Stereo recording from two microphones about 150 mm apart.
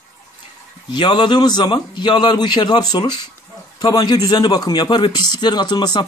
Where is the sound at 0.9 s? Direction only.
30° left (ahead or behind).